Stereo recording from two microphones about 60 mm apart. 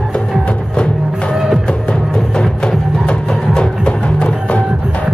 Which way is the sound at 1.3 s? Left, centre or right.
Centre.